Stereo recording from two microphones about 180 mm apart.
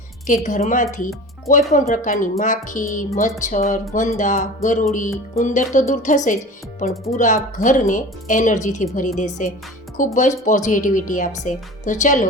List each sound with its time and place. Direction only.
0.4 s speech: 45° left (ahead or behind)